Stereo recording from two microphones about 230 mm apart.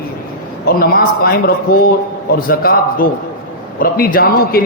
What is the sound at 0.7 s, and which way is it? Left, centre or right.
A man's voice, left.